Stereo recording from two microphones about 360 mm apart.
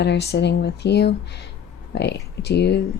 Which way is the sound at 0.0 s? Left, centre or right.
Left.